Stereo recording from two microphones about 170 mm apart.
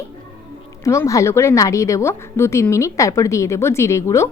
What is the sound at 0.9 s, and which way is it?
A woman's voice, 20° left (ahead or behind).